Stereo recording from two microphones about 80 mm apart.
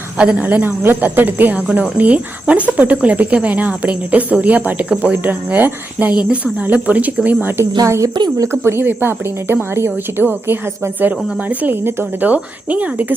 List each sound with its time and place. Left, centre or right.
0.2 s a woman's voice: centre